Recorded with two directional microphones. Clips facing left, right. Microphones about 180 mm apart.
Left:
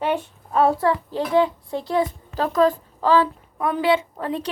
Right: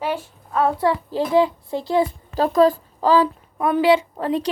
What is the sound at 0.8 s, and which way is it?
Speech, 30° right (ahead or behind).